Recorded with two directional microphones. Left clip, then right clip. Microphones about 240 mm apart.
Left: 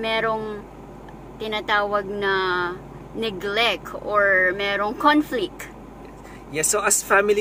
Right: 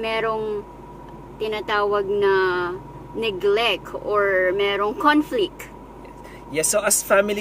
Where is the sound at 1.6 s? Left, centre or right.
Centre.